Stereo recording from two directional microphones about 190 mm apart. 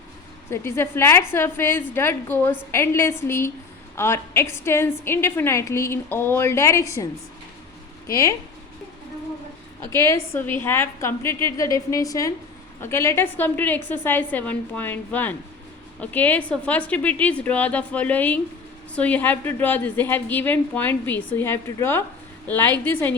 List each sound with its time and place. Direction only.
0.5 s a woman's voice: 15° left (ahead or behind)
9.8 s a woman's voice: 15° left (ahead or behind)